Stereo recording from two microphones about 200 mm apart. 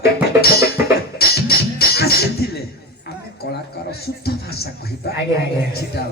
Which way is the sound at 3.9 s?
50° left (ahead or behind).